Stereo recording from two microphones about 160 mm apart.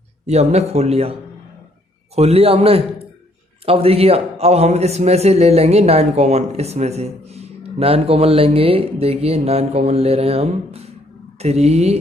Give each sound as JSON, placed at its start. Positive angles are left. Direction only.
{"t": 0.3, "sound": "a man's voice", "side_deg": -40}
{"t": 2.1, "sound": "a man's voice", "side_deg": -40}